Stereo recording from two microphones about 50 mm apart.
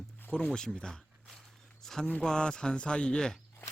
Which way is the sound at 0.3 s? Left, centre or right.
Centre.